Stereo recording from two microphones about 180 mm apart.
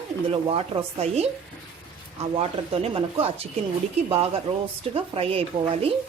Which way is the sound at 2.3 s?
30° right (ahead or behind).